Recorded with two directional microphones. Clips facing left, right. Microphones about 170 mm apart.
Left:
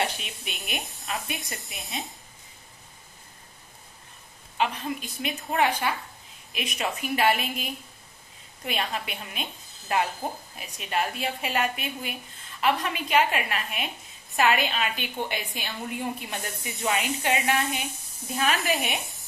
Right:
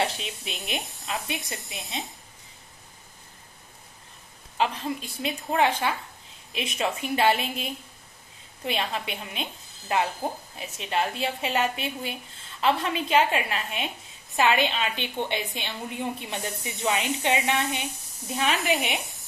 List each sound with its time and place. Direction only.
0.0 s a woman's voice: 25° right (ahead or behind)
4.6 s a woman's voice: 30° right (ahead or behind)